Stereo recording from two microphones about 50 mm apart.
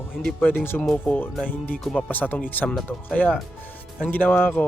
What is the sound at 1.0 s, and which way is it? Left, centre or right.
A man's voice, left.